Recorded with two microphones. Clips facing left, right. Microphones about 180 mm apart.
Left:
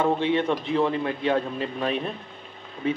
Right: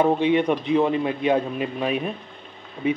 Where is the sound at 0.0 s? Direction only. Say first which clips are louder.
Right 4 dB; 15° right (ahead or behind).